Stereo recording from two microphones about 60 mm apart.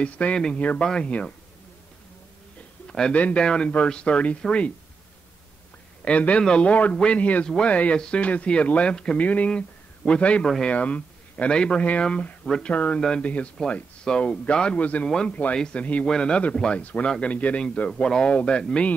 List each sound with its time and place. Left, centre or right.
0.0 s speech: left
3.1 s speech: left
6.0 s speech: left
10.4 s speech: centre
10.7 s speech: left
12.7 s speech: left
16.8 s speech: left